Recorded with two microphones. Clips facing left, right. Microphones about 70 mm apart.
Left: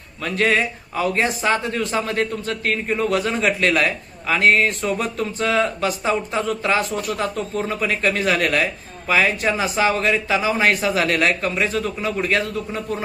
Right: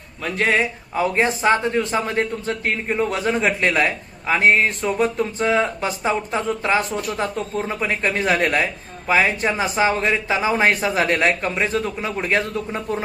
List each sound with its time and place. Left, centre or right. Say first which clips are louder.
0.2 s a man's voice: even; centre